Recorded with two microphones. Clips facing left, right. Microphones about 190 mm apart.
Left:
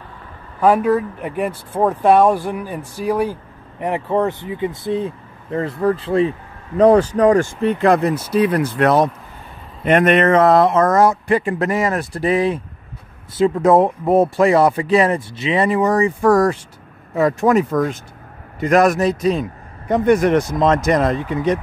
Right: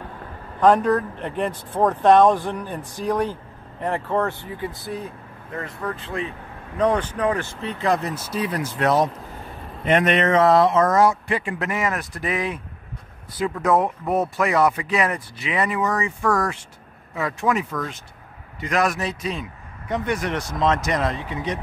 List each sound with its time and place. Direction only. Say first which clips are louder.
0.6 s speech: left 2 dB; 5° left (ahead or behind); by 6.3 s 35° left (ahead or behind)
7.2 s a man's voice: left 10 dB; 50° left (ahead or behind)